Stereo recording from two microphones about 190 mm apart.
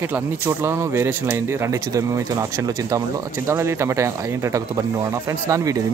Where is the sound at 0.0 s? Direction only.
10° right (ahead or behind).